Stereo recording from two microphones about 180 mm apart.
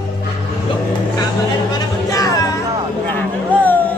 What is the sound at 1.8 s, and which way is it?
Music, 20° left (ahead or behind).